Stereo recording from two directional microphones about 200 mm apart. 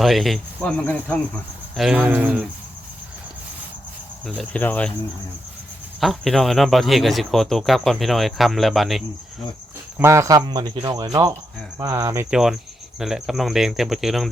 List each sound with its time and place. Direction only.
0.0 s speech: centre (ahead or behind)
1.7 s speech: 5° right (ahead or behind)
4.3 s cricket: 5° left (ahead or behind)
6.0 s speech: centre (ahead or behind)
10.0 s speech: 15° right (ahead or behind)